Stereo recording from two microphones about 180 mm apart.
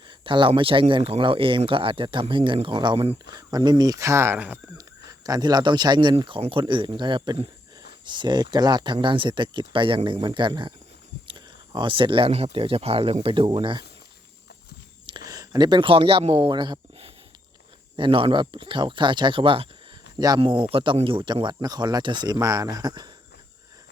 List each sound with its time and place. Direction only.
0.1 s speech: 25° right (ahead or behind)
15.3 s speech: 20° right (ahead or behind)